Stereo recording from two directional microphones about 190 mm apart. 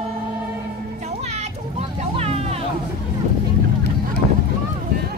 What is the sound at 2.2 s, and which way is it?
Vehicle, 30° right (ahead or behind).